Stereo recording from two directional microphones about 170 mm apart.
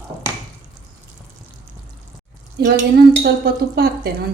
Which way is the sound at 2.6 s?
70° right (ahead or behind).